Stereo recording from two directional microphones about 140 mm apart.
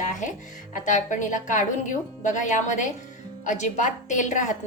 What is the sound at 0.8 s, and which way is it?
A woman's voice, 65° left (ahead or behind).